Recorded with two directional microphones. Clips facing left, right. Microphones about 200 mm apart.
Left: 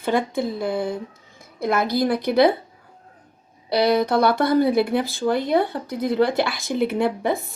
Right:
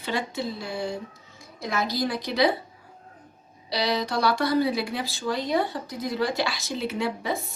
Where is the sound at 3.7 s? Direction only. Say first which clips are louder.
Left 8 dB; 55° left (ahead or behind).